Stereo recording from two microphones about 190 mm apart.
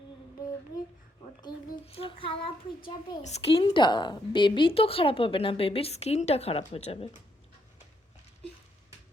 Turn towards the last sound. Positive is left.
turn(degrees=30)  # may be behind; listen again after turning